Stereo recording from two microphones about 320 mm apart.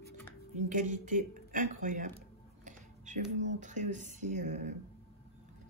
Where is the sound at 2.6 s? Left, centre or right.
Right.